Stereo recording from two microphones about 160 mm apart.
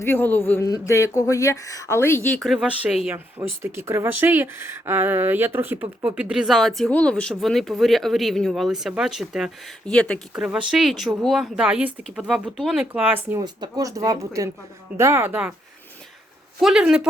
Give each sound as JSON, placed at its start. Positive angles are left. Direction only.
{"t": 0.0, "sound": "speech", "side_deg": 15}
{"t": 2.4, "sound": "speech", "side_deg": 0}
{"t": 13.4, "sound": "speech", "side_deg": -25}
{"t": 16.6, "sound": "speech", "side_deg": -5}